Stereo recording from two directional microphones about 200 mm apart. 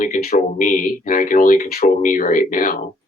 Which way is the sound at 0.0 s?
45° left (ahead or behind).